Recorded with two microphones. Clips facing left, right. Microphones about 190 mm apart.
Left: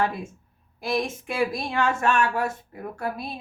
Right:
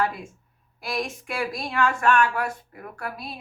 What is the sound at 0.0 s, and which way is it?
Speech, 25° left (ahead or behind).